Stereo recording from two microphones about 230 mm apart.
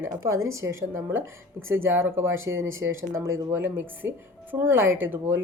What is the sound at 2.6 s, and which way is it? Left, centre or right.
Speech, right.